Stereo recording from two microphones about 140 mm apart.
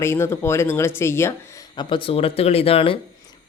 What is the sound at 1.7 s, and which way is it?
Speech, 35° left (ahead or behind).